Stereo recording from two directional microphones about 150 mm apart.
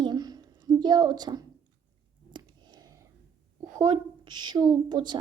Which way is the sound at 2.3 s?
30° right (ahead or behind).